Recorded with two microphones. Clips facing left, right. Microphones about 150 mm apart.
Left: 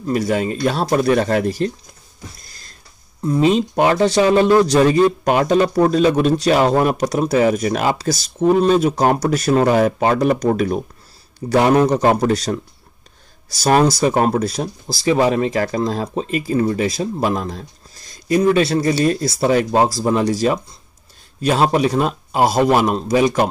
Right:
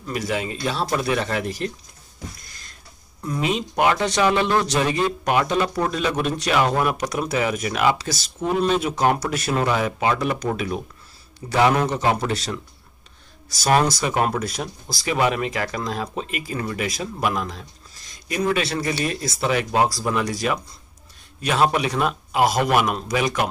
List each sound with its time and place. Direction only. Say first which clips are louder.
0.0 s speech: left 7 dB; 35° left (ahead or behind)
2.4 s a sound: left 1 dB; 30° left (ahead or behind)
3.2 s speech: left 9 dB; 30° left (ahead or behind)
13.6 s speech: left 5 dB; 35° left (ahead or behind)